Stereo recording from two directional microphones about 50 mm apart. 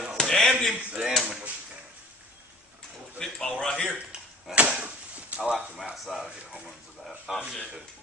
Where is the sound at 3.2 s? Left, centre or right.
Centre.